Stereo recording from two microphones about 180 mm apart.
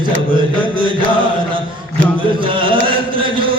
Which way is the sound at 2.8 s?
30° right (ahead or behind).